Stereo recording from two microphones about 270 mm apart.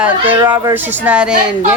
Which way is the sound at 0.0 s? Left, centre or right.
Centre.